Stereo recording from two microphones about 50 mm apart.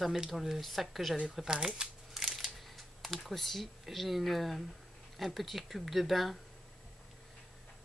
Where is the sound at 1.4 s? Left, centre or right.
Centre.